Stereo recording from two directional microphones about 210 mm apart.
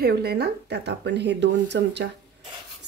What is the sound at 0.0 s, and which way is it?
Speech, 50° right (ahead or behind).